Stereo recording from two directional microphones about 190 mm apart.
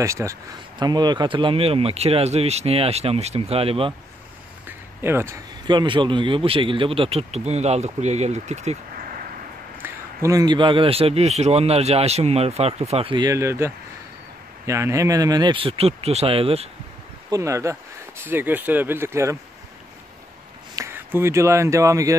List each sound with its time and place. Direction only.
0.0 s speech: 15° right (ahead or behind)
4.6 s a man's voice: 10° right (ahead or behind); by 9.2 s 45° right (ahead or behind)
9.8 s a man's voice: 15° right (ahead or behind)
17.3 s speech: 15° right (ahead or behind)
20.7 s speech: 15° right (ahead or behind)